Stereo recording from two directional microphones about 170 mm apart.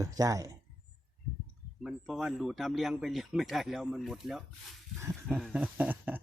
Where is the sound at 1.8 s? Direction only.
Centre (ahead or behind).